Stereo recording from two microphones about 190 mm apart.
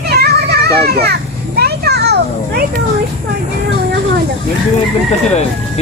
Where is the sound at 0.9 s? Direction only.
55° right (ahead or behind).